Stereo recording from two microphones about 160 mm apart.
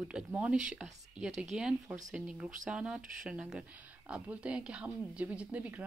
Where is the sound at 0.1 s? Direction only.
5° right (ahead or behind).